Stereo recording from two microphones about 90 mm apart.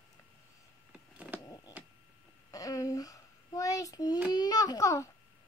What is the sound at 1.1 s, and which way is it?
Power windows, 15° right (ahead or behind).